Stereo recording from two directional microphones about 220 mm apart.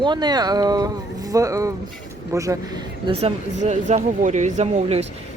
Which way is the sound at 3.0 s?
25° right (ahead or behind).